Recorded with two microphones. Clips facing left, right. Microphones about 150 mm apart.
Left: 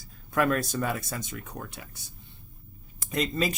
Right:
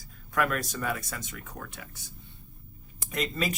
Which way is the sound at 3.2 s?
25° left (ahead or behind).